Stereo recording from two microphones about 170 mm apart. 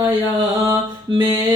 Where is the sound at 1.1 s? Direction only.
30° right (ahead or behind).